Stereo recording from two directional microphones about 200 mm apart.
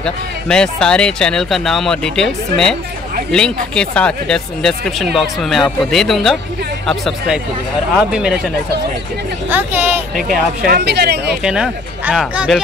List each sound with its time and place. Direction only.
0.0 s speech: 5° left (ahead or behind)
9.5 s speech: 10° right (ahead or behind)
10.6 s speech: 50° right (ahead or behind)
11.4 s speech: 5° right (ahead or behind)